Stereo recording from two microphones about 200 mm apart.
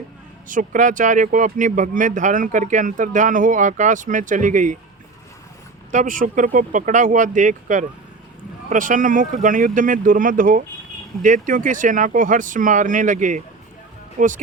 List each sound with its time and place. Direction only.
0.4 s speech: 40° right (ahead or behind)
5.9 s speech: 40° right (ahead or behind)